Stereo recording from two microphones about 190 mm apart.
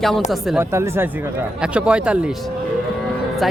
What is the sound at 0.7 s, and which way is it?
A man's voice, 15° right (ahead or behind).